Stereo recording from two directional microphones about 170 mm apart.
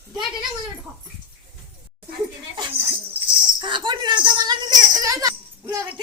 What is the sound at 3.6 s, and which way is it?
Speech, 25° right (ahead or behind).